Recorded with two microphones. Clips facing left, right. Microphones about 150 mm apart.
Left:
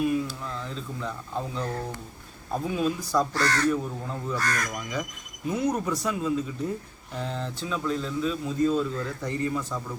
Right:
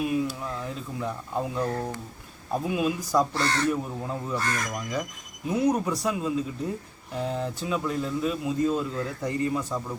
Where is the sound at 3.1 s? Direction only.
20° right (ahead or behind).